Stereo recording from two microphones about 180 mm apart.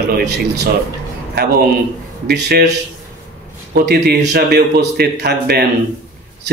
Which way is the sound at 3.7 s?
65° right (ahead or behind).